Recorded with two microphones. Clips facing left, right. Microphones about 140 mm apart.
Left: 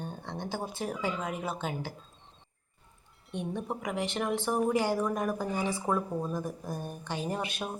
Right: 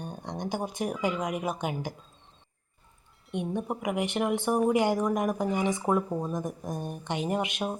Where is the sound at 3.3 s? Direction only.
15° right (ahead or behind).